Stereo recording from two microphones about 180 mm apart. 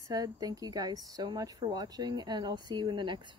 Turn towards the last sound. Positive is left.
turn(degrees=-25)  # may be behind; listen again after turning